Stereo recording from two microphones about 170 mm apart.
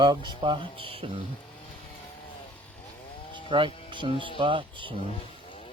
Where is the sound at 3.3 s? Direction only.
30° right (ahead or behind).